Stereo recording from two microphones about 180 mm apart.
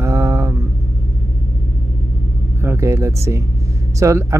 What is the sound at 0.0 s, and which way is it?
Mantra, 15° right (ahead or behind).